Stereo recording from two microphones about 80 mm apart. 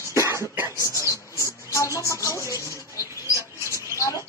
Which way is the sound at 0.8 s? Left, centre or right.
Left.